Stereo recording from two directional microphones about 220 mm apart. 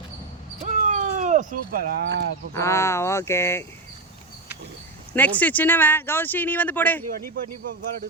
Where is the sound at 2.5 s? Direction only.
15° left (ahead or behind).